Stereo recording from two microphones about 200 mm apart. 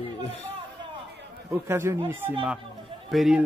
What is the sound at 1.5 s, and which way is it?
Speech, 15° right (ahead or behind).